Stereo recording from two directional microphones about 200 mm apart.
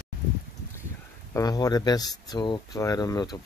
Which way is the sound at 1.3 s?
20° left (ahead or behind).